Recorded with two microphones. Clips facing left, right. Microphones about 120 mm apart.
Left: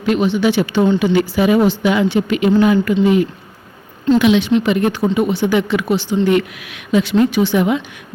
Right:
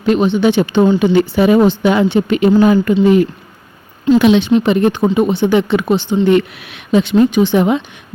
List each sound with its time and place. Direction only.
0.0 s speech: 30° right (ahead or behind)
7.6 s speech: 30° right (ahead or behind)